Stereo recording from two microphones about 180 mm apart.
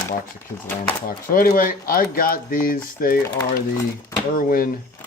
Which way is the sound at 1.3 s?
50° left (ahead or behind).